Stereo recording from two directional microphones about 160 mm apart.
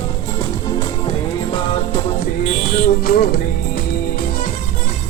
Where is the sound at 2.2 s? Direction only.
60° left (ahead or behind).